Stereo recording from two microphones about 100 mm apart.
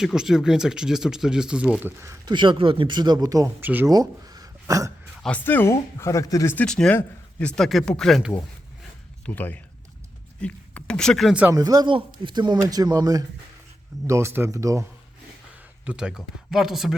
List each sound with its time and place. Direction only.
0.0 s speech: 5° right (ahead or behind)
1.8 s a man's voice: 25° right (ahead or behind)
2.2 s a man's voice: 50° right (ahead or behind)
3.6 s a man's voice: 20° right (ahead or behind)
3.8 s a sound: 40° right (ahead or behind)
5.4 s speech: 20° left (ahead or behind)
6.7 s a man's voice: 5° left (ahead or behind)
7.5 s speech: 5° left (ahead or behind)
9.2 s speech: 20° left (ahead or behind)
11.5 s speech: 40° right (ahead or behind)
11.9 s a man's voice: 55° right (ahead or behind); by 13.2 s 40° right (ahead or behind)
14.1 s a man's voice: 25° right (ahead or behind)
15.9 s speech: 10° right (ahead or behind)